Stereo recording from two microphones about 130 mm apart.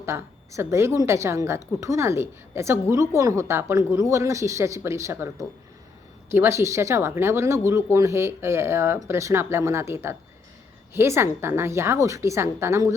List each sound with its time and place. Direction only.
0.0 s a woman's voice: 20° right (ahead or behind)
6.3 s a woman's voice: 20° right (ahead or behind)